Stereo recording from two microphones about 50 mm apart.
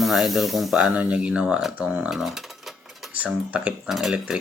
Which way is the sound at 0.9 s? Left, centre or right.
Right.